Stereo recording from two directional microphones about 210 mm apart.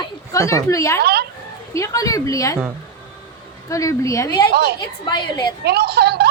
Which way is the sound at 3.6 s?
15° left (ahead or behind).